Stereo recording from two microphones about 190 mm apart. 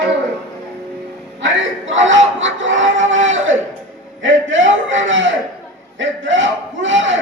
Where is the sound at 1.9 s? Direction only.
80° right.